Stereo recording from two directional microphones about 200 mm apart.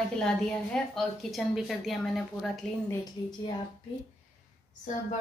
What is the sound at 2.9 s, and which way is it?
Speech, 20° left (ahead or behind).